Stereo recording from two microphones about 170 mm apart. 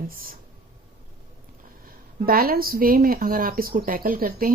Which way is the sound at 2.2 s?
60° right (ahead or behind).